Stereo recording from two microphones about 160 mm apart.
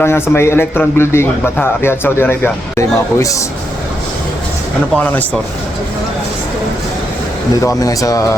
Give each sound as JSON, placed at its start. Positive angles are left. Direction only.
{"t": 0.0, "sound": "a man's voice", "side_deg": 15}
{"t": 7.6, "sound": "speech", "side_deg": 20}